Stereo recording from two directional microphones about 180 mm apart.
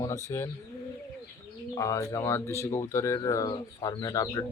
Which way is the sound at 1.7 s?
15° left (ahead or behind).